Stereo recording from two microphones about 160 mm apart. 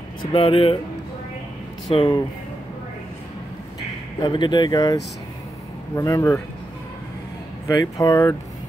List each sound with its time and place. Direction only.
0.2 s speech: 35° left (ahead or behind)
2.0 s speech: 30° left (ahead or behind)
4.2 s speech: 30° left (ahead or behind)
5.9 s speech: 20° left (ahead or behind)
7.6 s speech: 20° left (ahead or behind)